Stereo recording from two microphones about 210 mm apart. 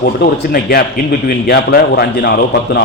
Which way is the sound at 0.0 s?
45° left (ahead or behind).